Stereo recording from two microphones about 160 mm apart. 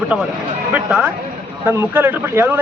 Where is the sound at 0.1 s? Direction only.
5° right (ahead or behind).